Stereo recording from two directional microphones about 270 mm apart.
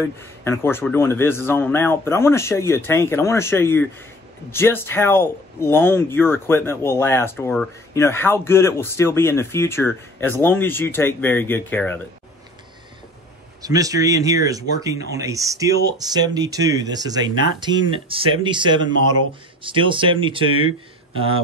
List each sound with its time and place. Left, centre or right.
0.4 s speech: centre
13.6 s speech: centre